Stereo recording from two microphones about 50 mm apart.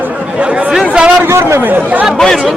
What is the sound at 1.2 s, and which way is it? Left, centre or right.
Speech, right.